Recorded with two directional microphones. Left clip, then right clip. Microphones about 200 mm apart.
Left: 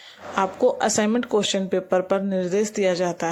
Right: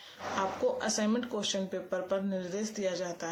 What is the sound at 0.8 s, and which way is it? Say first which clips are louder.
Speech: left 10 dB; 40° left (ahead or behind).